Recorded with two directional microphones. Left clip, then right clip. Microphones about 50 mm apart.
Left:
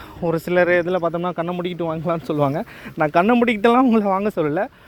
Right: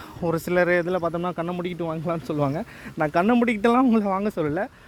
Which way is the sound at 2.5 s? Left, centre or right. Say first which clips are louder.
Left 5 dB; centre.